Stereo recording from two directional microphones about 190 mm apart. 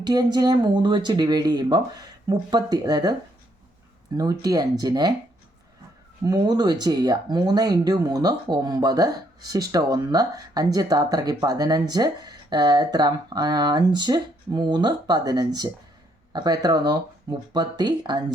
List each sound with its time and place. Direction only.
0.0 s speech: 20° right (ahead or behind)
4.2 s speech: 20° right (ahead or behind)
6.2 s speech: 20° right (ahead or behind)